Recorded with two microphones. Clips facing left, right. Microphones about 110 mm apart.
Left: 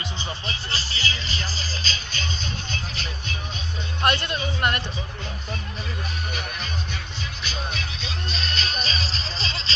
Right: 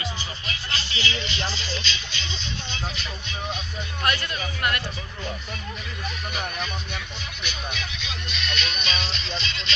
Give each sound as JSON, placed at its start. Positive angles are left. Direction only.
{"t": 0.4, "sound": "music", "side_deg": 35}
{"t": 4.0, "sound": "speech", "side_deg": 30}
{"t": 7.4, "sound": "music", "side_deg": 35}